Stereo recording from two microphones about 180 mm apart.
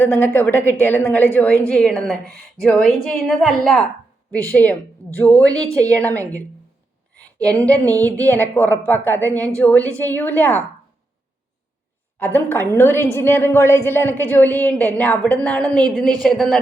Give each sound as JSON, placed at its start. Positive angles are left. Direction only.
{"t": 0.0, "sound": "a woman's voice", "side_deg": 10}
{"t": 12.2, "sound": "a woman's voice", "side_deg": 10}